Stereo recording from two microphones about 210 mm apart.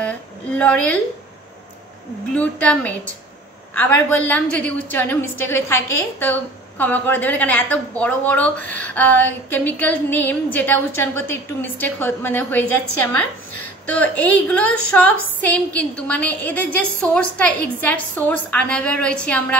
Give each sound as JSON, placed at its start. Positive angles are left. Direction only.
{"t": 0.0, "sound": "a sound", "side_deg": 5}
{"t": 2.3, "sound": "a woman's voice", "side_deg": 5}
{"t": 13.8, "sound": "a woman's voice", "side_deg": 5}